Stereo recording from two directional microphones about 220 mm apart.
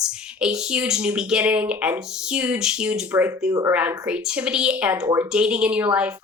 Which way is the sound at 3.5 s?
15° right (ahead or behind).